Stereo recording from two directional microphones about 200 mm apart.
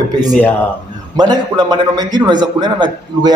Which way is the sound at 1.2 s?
20° right (ahead or behind).